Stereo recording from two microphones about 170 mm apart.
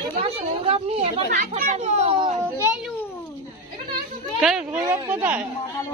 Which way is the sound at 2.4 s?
10° right (ahead or behind).